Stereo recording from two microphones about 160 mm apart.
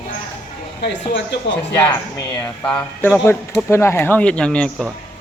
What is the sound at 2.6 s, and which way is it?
Speech, 10° left (ahead or behind).